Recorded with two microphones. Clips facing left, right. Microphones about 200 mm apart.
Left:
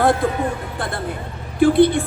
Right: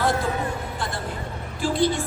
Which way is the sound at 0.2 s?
55° left (ahead or behind).